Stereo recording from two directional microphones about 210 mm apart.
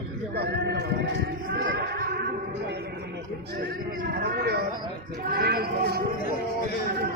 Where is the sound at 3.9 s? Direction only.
45° right (ahead or behind).